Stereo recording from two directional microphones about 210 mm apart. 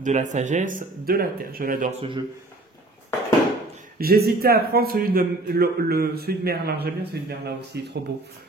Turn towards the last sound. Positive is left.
turn(degrees=-50)  # may be behind; listen again after turning